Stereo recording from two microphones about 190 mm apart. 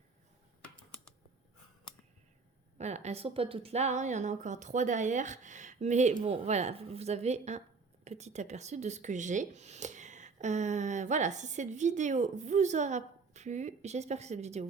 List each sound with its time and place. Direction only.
2.7 s speech: 35° right (ahead or behind)